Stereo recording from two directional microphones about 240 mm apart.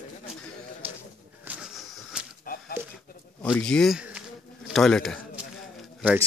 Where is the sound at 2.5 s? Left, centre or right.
Left.